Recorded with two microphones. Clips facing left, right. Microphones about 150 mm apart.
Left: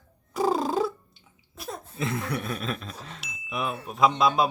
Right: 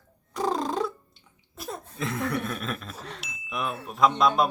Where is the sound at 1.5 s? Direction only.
Centre (ahead or behind).